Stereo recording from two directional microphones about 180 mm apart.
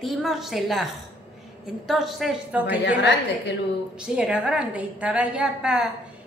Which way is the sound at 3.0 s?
70° left (ahead or behind).